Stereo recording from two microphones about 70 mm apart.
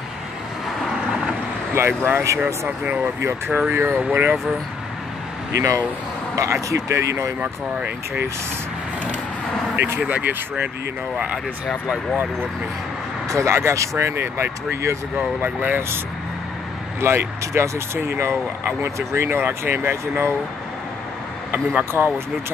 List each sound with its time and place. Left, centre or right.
1.7 s speech: right
2.8 s speech: right
3.2 s speech: right
6.3 s speech: right
7.3 s speech: centre
9.9 s speech: right
13.3 s speech: right
15.1 s speech: right
17.0 s speech: right
22.0 s speech: right